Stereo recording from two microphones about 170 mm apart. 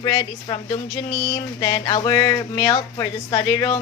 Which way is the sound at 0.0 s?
25° left (ahead or behind).